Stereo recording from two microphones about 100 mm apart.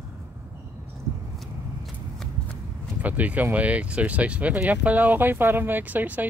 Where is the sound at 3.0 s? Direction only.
15° right (ahead or behind).